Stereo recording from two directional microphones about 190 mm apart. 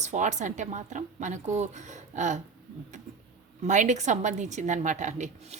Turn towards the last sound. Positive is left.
turn(degrees=-40)  # may be behind; listen again after turning